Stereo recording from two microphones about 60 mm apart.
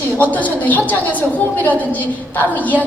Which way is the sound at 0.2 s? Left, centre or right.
Left.